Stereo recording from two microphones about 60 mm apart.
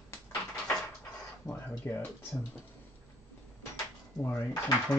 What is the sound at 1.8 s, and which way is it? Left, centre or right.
Speech, left.